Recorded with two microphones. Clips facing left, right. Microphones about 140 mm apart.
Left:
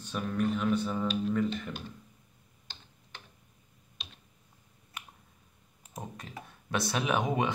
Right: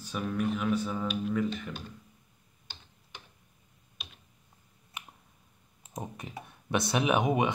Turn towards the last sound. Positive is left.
turn(degrees=-15)  # may be behind; listen again after turning